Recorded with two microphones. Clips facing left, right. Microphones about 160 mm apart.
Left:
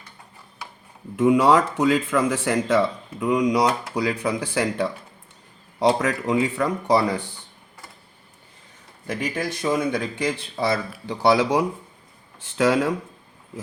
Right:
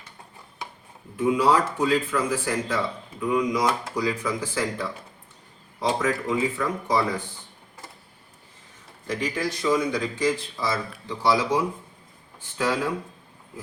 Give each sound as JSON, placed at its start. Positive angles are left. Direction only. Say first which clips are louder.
{"t": 1.1, "sound": "speech", "louder": "left 4 dB", "side_deg": 90}
{"t": 9.0, "sound": "speech", "louder": "left 1 dB", "side_deg": 50}
{"t": 11.2, "sound": "speech", "louder": "left 4 dB", "side_deg": 70}
{"t": 12.4, "sound": "speech", "louder": "left 6 dB", "side_deg": 90}